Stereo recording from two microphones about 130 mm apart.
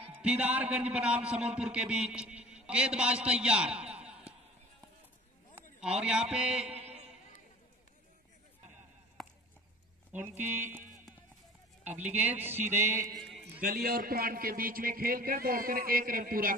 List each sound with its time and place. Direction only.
0.1 s a man's voice: 10° right (ahead or behind)
5.8 s a man's voice: 5° right (ahead or behind)
6.7 s a sound: 55° right (ahead or behind)
10.1 s a man's voice: 15° right (ahead or behind)
12.0 s a man's voice: 15° right (ahead or behind)
13.7 s a man's voice: 90° right